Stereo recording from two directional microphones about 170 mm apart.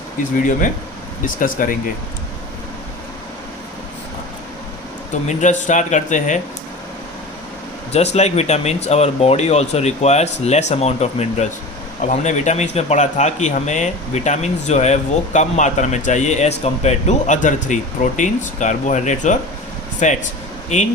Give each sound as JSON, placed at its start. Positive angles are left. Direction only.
{"t": 0.3, "sound": "speech", "side_deg": 50}
{"t": 5.3, "sound": "speech", "side_deg": 45}
{"t": 7.9, "sound": "speech", "side_deg": 40}